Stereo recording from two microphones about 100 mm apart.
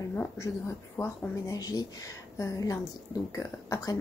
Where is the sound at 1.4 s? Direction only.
35° left (ahead or behind).